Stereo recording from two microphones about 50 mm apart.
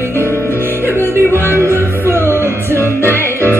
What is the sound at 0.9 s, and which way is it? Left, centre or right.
Music, left.